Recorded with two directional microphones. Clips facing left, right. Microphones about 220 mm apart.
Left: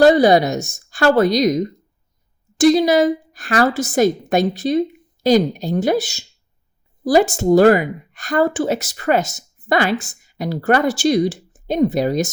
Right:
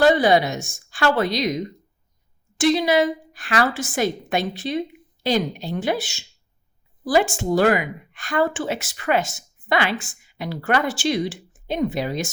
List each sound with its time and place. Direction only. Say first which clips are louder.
0.0 s speech: left 5 dB; 40° left (ahead or behind)